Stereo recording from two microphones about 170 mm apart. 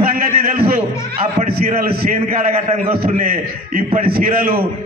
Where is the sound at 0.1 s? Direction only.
60° right (ahead or behind).